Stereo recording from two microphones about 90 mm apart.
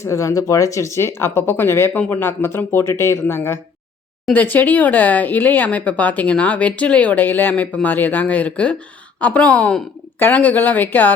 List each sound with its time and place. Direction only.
0.0 s a woman's voice: 35° left (ahead or behind)